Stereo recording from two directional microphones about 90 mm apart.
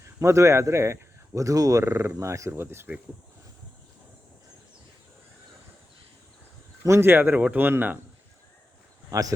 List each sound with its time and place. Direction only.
0.2 s speech: 35° right (ahead or behind)
6.8 s speech: 30° right (ahead or behind)
9.0 s speech: 40° right (ahead or behind)